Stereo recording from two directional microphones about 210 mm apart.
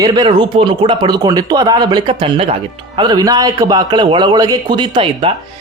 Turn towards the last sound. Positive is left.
turn(degrees=-25)  # may be behind; listen again after turning